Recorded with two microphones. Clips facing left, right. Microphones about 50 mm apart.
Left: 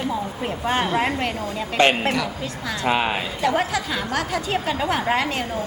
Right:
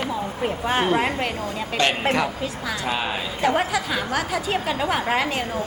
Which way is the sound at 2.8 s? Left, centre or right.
Left.